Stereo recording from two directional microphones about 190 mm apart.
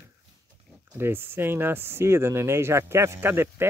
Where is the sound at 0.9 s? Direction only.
10° right (ahead or behind).